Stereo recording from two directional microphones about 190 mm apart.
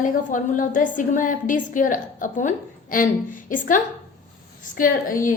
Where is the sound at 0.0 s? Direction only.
45° left (ahead or behind).